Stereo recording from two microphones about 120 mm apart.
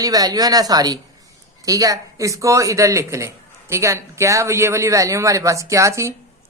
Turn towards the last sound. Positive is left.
turn(degrees=-25)  # may be behind; listen again after turning